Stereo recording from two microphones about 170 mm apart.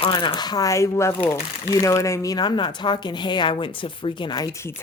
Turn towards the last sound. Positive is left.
turn(degrees=25)  # may be behind; listen again after turning